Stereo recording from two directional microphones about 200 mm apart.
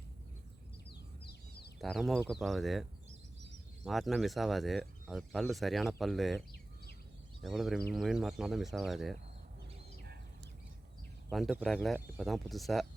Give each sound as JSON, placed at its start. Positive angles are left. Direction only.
{"t": 0.9, "sound": "a sound", "side_deg": 55}
{"t": 1.8, "sound": "speech", "side_deg": 0}
{"t": 3.8, "sound": "speech", "side_deg": 0}
{"t": 7.4, "sound": "speech", "side_deg": 0}
{"t": 11.3, "sound": "speech", "side_deg": 0}